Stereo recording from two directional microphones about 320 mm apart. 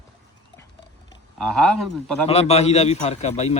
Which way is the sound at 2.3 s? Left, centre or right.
Centre.